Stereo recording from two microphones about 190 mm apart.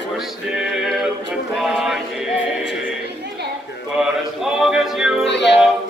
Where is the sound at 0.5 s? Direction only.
5° right (ahead or behind).